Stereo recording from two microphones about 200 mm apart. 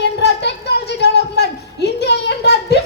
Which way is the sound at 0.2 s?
55° left (ahead or behind).